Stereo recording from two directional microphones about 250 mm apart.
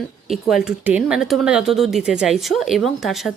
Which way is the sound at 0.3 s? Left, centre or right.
Centre.